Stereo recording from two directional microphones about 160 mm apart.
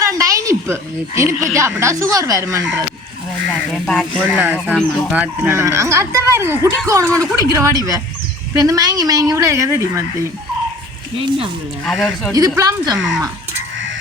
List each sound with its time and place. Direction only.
0.0 s a sound: 20° right (ahead or behind)
1.5 s a woman's voice: 15° right (ahead or behind)
3.5 s a woman's voice: centre (ahead or behind); by 10.0 s 20° right (ahead or behind)
11.2 s speech: 35° right (ahead or behind)
11.9 s speech: centre (ahead or behind)
12.5 s a woman's voice: 25° right (ahead or behind)